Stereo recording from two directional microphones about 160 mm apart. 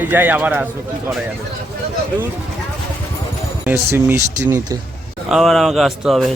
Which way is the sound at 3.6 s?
15° right (ahead or behind).